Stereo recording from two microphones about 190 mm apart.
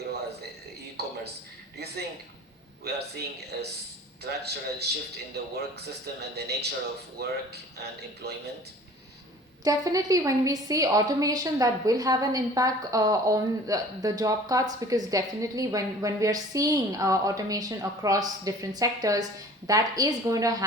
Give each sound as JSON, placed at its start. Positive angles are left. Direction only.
{"t": 1.0, "sound": "a sound", "side_deg": -55}
{"t": 2.8, "sound": "a man's voice", "side_deg": -55}
{"t": 9.6, "sound": "a woman's voice", "side_deg": -20}